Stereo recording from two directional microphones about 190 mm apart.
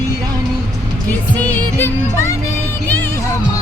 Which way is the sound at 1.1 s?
10° left (ahead or behind).